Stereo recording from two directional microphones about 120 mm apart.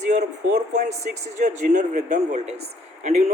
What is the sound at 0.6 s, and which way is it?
Speech, 80° right.